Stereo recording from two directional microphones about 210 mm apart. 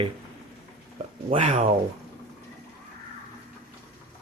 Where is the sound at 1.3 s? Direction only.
30° right (ahead or behind).